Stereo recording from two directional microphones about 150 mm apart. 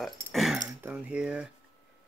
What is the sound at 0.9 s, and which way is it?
Speech, 10° right (ahead or behind).